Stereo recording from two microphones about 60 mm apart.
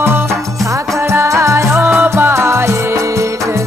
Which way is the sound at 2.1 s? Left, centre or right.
Right.